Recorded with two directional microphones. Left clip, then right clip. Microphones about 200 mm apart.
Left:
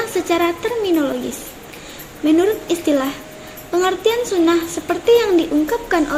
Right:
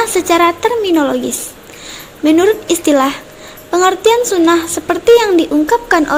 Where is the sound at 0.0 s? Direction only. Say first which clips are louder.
Right 7 dB; 40° right (ahead or behind).